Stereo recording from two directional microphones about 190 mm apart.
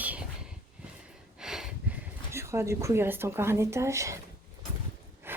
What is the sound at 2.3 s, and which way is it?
Speech, 15° right (ahead or behind).